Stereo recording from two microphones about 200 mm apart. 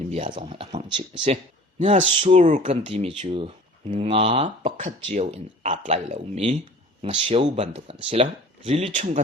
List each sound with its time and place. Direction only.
0.3 s speech: 25° right (ahead or behind)